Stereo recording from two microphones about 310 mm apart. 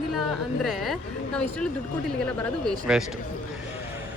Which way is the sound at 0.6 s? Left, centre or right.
Centre.